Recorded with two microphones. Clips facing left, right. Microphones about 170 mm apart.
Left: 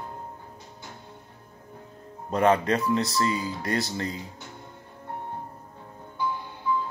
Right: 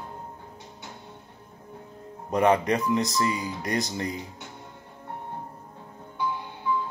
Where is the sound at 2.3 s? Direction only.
15° right (ahead or behind).